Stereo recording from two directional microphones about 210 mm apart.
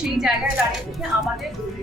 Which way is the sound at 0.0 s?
Centre (ahead or behind).